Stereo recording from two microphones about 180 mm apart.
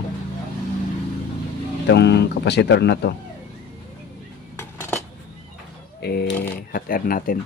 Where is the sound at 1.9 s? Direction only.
70° left (ahead or behind).